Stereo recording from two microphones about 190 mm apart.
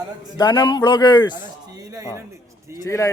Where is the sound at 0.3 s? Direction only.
25° left (ahead or behind).